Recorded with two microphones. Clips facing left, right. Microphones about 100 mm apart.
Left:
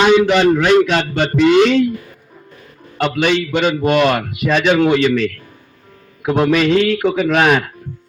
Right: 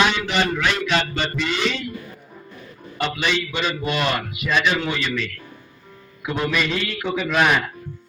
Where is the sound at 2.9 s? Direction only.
60° left (ahead or behind).